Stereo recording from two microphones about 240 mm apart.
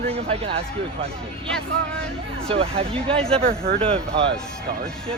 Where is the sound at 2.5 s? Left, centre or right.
Right.